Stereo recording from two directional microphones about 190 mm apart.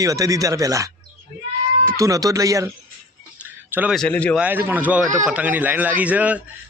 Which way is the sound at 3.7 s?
10° right (ahead or behind).